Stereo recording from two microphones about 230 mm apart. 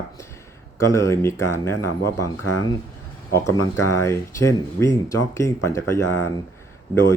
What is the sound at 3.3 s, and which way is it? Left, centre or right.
Speech, centre.